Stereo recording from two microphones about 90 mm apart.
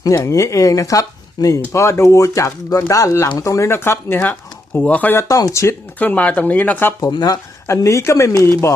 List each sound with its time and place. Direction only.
0.0 s speech: 35° left (ahead or behind); by 5.1 s 15° left (ahead or behind)
5.1 s speech: 40° left (ahead or behind)
6.0 s speech: 15° left (ahead or behind)
7.1 s speech: 50° left (ahead or behind)
7.7 s speech: 35° left (ahead or behind)